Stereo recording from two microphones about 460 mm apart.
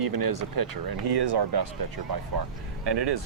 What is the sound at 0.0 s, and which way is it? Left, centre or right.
Speech, right.